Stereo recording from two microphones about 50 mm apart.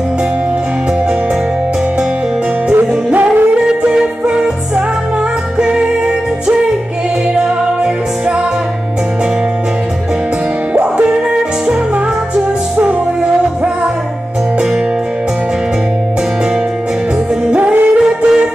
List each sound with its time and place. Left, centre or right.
2.7 s music: right
3.5 s music: centre
7.4 s music: centre
10.7 s music: right
12.7 s music: right
17.5 s music: right